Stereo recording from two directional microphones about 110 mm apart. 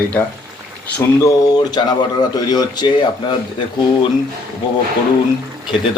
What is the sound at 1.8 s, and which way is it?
Speech, 40° left (ahead or behind).